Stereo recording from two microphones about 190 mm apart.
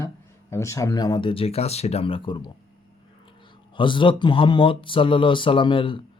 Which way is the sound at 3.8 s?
25° left (ahead or behind).